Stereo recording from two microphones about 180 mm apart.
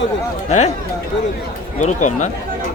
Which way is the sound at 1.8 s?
40° left (ahead or behind).